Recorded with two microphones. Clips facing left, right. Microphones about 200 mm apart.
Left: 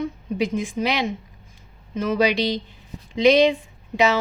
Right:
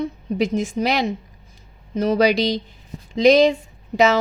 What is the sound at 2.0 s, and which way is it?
A woman's voice, 40° right (ahead or behind).